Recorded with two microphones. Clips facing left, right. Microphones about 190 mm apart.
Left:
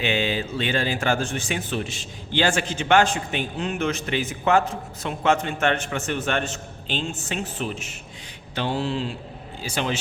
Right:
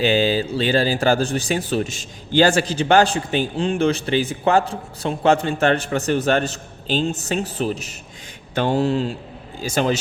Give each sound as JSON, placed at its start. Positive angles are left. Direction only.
{"t": 0.0, "sound": "a man's voice", "side_deg": -35}